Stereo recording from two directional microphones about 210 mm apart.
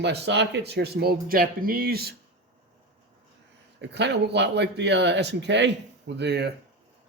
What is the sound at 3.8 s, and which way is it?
Speech, 55° right (ahead or behind).